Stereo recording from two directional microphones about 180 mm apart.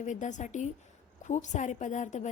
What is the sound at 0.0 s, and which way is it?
A woman's voice, 45° left (ahead or behind).